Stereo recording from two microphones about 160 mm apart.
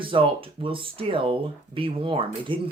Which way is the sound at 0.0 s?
35° right (ahead or behind).